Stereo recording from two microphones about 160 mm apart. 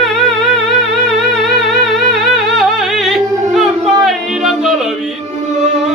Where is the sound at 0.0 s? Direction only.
Centre (ahead or behind).